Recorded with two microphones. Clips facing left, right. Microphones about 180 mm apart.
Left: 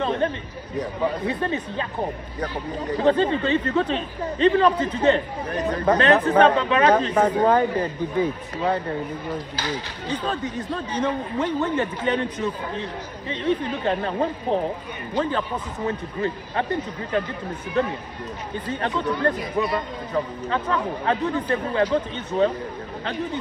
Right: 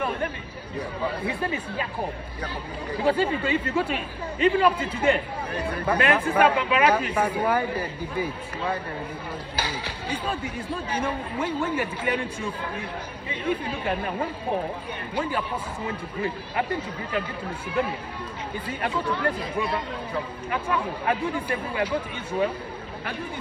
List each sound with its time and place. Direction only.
0.0 s chatter: 25° left (ahead or behind)
0.7 s speech: 10° right (ahead or behind)
2.9 s speech: 10° right (ahead or behind)
9.3 s speech: 10° right (ahead or behind)
15.1 s speech: 10° right (ahead or behind)
18.7 s speech: 10° right (ahead or behind)